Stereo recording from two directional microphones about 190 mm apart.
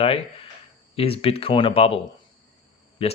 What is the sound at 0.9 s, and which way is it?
Speech, 30° left (ahead or behind).